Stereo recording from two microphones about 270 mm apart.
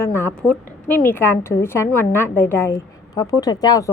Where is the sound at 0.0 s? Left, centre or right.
Centre.